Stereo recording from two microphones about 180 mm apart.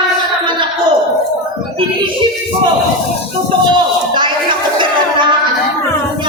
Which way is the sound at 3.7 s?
25° right (ahead or behind).